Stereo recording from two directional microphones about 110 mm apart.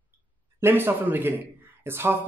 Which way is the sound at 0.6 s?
20° right (ahead or behind).